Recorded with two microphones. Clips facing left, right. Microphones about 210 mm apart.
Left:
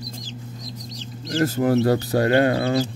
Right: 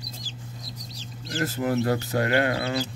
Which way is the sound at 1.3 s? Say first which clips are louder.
Left 6 dB; 40° left (ahead or behind).